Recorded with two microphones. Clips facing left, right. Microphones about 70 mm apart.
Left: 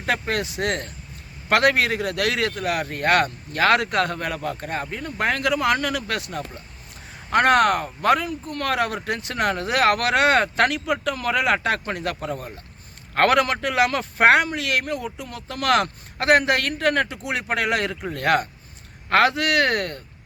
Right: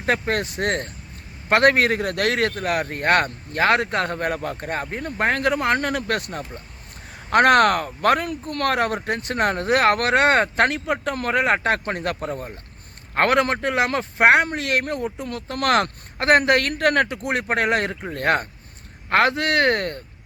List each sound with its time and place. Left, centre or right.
0.0 s speech: right
3.6 s speech: right
7.3 s speech: right
8.7 s speech: right
13.1 s speech: right
14.4 s speech: right